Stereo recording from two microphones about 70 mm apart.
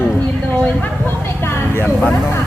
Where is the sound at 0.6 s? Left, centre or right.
Left.